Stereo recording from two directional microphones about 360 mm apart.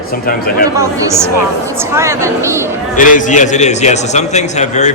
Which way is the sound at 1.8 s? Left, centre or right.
Centre.